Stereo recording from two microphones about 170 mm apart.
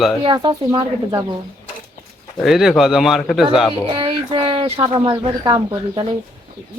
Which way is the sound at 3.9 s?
30° right (ahead or behind).